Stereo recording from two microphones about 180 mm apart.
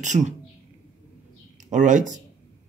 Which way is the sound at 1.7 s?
45° right (ahead or behind).